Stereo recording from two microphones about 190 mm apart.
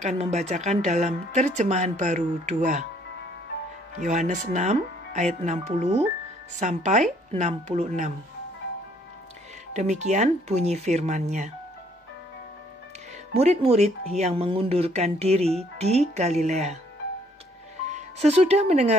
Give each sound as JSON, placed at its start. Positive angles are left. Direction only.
{"t": 0.0, "sound": "speech", "side_deg": -35}
{"t": 4.0, "sound": "speech", "side_deg": -40}
{"t": 9.8, "sound": "speech", "side_deg": -40}
{"t": 13.3, "sound": "speech", "side_deg": -35}
{"t": 17.8, "sound": "speech", "side_deg": -35}